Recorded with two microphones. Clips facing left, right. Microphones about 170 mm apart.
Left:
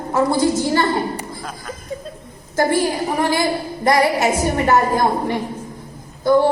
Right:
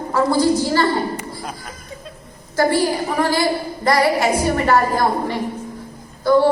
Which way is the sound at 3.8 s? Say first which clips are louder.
Left 1 dB; 20° left (ahead or behind).